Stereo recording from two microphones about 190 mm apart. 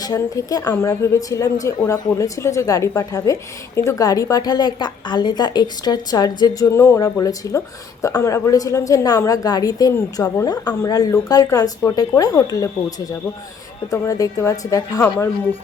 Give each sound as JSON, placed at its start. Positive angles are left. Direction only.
{"t": 0.0, "sound": "a woman's voice", "side_deg": 20}
{"t": 13.9, "sound": "a woman's voice", "side_deg": 15}